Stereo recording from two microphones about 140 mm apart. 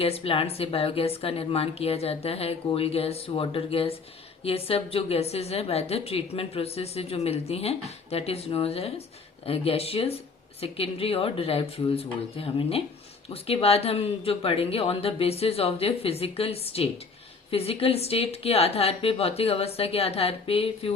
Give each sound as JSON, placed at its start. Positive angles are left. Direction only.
{"t": 0.0, "sound": "a woman's voice", "side_deg": 45}